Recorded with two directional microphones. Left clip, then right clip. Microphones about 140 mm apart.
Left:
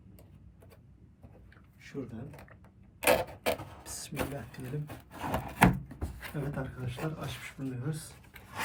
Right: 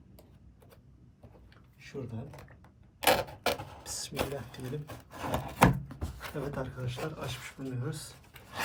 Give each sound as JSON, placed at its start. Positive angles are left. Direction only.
{"t": 3.0, "sound": "mechanisms", "side_deg": 0}
{"t": 6.3, "sound": "speech", "side_deg": 0}